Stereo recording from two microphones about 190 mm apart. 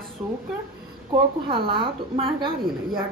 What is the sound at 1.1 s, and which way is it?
A woman's voice, 25° right (ahead or behind).